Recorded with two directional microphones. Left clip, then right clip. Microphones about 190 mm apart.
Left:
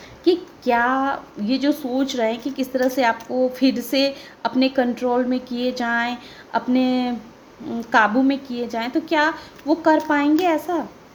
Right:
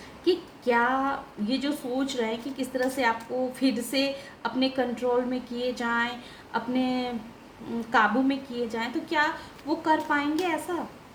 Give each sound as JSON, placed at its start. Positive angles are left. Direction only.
{"t": 0.3, "sound": "a woman's voice", "side_deg": 45}